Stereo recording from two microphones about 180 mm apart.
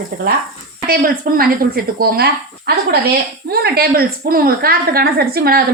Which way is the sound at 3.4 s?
60° right (ahead or behind).